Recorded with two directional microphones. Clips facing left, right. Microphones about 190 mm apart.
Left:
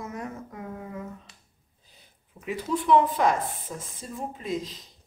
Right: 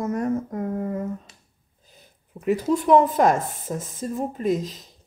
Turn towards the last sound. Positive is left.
turn(degrees=-45)  # may be behind; listen again after turning